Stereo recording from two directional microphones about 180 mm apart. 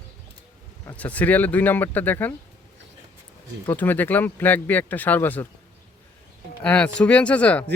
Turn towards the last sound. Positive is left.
turn(degrees=5)  # may be behind; listen again after turning